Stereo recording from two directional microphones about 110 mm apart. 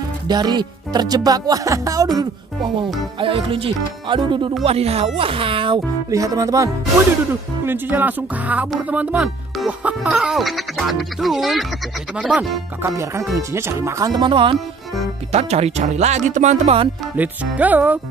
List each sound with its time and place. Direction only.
0.3 s speech: 40° right (ahead or behind)
3.2 s speech: 50° right (ahead or behind)
4.6 s speech: 65° right (ahead or behind)
6.0 s speech: 30° right (ahead or behind)
7.6 s speech: 20° right (ahead or behind)
9.7 s music: 10° right (ahead or behind)
12.2 s speech: 10° right (ahead or behind)
12.8 s speech: 25° right (ahead or behind)
14.1 s speech: 50° right (ahead or behind)
15.3 s speech: 75° right (ahead or behind)
17.1 s speech: 15° right (ahead or behind)